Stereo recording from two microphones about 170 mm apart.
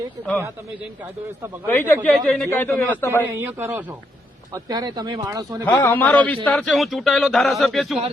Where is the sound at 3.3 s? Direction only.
15° right (ahead or behind).